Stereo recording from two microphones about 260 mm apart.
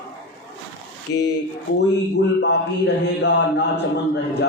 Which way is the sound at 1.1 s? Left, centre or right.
Left.